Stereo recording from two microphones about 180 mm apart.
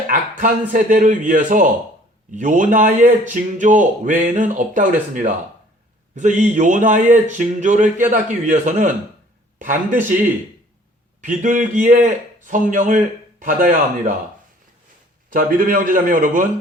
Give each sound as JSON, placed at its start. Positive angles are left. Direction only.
{"t": 0.1, "sound": "a man's voice", "side_deg": -50}
{"t": 11.2, "sound": "a man's voice", "side_deg": -45}
{"t": 15.3, "sound": "a man's voice", "side_deg": -50}